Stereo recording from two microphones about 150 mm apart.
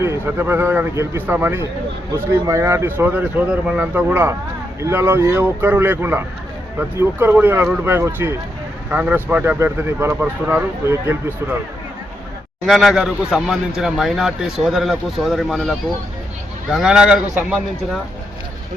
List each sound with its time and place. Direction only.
0.0 s speech: 15° right (ahead or behind)
12.6 s a man's voice: centre (ahead or behind)